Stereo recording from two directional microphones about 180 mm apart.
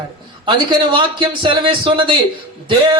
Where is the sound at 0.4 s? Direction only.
25° right (ahead or behind).